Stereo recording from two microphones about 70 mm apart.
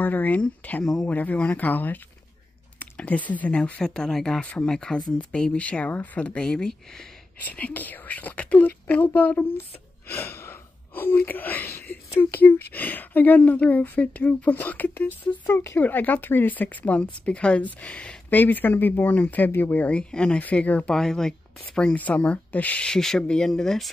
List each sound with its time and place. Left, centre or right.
0.0 s a woman's voice: left
3.8 s speech: centre
7.3 s a woman's voice: left
10.0 s gasp: left
11.0 s a woman's voice: left
15.5 s speech: left
15.8 s a woman's voice: left
20.9 s speech: centre
21.9 s speech: left